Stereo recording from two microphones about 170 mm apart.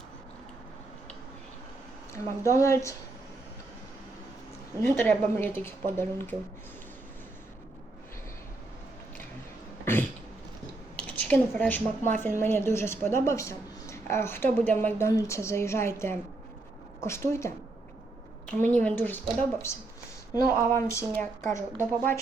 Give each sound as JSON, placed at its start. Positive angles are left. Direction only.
{"t": 2.5, "sound": "a woman's voice", "side_deg": 15}
{"t": 4.9, "sound": "a woman's voice", "side_deg": 15}
{"t": 9.8, "sound": "a sound", "side_deg": 15}
{"t": 10.9, "sound": "a woman's voice", "side_deg": 5}